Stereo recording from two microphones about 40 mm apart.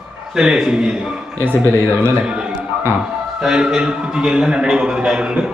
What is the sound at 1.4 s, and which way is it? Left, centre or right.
Speech, right.